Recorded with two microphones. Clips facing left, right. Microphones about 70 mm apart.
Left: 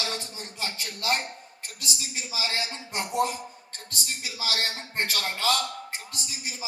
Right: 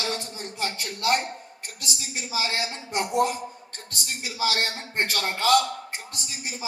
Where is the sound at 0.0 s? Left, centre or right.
Right.